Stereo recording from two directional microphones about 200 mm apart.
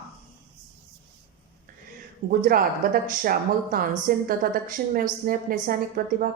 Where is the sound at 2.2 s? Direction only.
45° right (ahead or behind).